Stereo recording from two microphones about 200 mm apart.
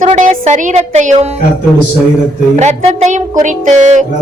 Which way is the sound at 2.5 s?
35° right (ahead or behind).